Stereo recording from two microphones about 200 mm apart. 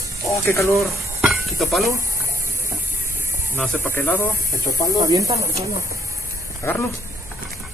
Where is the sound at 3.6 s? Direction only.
10° left (ahead or behind).